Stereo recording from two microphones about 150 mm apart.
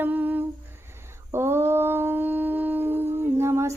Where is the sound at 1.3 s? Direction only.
15° right (ahead or behind).